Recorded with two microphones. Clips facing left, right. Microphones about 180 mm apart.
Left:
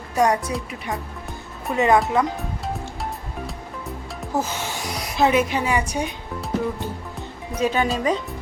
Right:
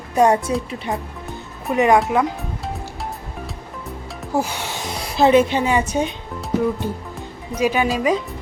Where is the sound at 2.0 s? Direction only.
Centre (ahead or behind).